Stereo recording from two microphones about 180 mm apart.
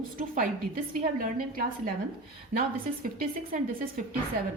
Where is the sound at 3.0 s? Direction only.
50° right (ahead or behind).